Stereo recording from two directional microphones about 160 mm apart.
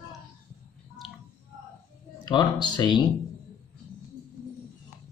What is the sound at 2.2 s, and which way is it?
Speech, 25° left (ahead or behind).